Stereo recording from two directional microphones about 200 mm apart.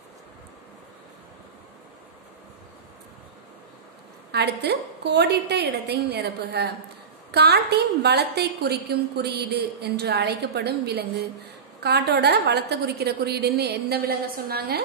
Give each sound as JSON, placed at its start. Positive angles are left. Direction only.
{"t": 4.3, "sound": "a woman's voice", "side_deg": -55}